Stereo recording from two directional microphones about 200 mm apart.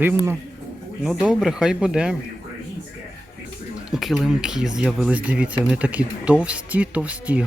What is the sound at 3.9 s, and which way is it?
Speech, centre (ahead or behind).